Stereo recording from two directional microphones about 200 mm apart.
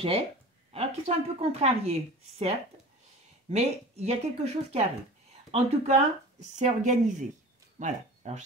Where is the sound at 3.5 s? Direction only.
30° right (ahead or behind).